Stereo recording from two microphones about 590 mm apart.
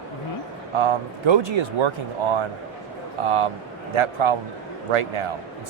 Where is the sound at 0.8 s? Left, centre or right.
Right.